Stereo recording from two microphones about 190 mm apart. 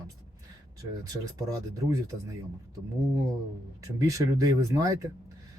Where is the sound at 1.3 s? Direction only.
15° right (ahead or behind).